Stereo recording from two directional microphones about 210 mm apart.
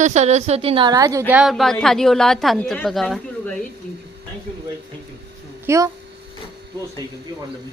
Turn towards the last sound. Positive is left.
turn(degrees=-15)  # may be behind; listen again after turning